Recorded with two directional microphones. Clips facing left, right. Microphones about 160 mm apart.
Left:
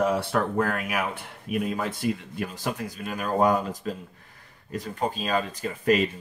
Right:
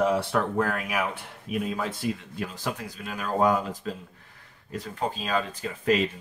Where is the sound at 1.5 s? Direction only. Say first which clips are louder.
Left 2 dB; 50° left (ahead or behind).